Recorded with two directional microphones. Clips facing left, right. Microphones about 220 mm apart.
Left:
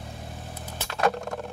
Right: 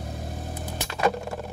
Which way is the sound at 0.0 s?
40° right (ahead or behind).